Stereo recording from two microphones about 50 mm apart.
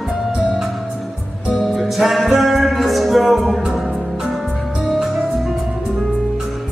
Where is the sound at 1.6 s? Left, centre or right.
Centre.